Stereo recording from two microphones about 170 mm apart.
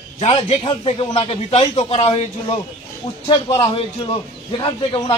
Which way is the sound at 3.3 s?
25° left (ahead or behind).